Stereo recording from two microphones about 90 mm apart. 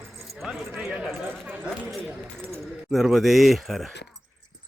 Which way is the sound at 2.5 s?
Centre (ahead or behind).